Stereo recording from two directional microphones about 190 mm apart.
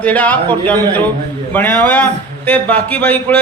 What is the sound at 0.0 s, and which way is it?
Speech, 10° left (ahead or behind).